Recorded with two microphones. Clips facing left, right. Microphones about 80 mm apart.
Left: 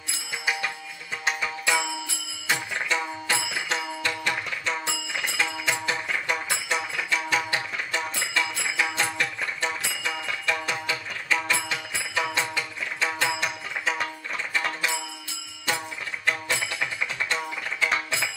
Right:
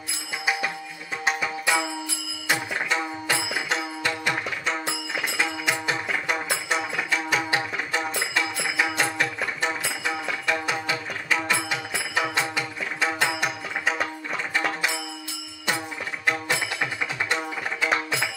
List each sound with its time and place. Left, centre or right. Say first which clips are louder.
1.2 s music: right 2 dB; centre
16.3 s music: right 2 dB; centre